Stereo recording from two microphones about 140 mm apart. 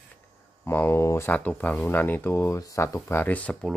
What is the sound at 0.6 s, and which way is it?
Speech, 15° left (ahead or behind).